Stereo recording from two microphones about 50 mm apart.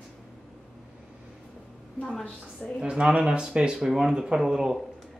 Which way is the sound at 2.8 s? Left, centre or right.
Right.